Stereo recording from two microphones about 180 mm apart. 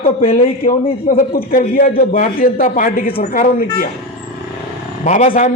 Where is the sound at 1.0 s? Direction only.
50° left (ahead or behind).